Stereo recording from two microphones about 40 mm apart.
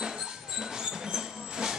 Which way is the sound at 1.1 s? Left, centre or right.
Centre.